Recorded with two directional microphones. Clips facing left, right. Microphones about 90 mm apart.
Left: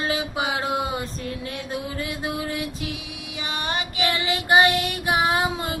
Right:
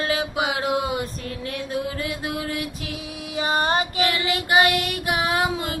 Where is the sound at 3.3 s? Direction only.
40° right (ahead or behind).